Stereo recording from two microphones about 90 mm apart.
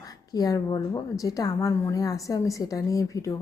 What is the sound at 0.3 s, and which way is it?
A woman's voice, 45° left (ahead or behind).